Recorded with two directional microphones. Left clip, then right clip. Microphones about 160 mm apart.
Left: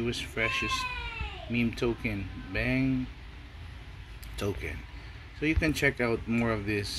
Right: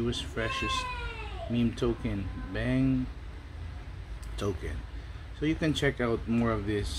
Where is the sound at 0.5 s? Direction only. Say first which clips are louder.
Left 1 dB; 5° left (ahead or behind).